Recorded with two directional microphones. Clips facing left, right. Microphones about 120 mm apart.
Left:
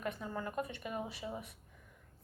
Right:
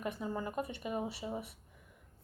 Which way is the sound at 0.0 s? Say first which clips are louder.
Right 2 dB; 10° right (ahead or behind).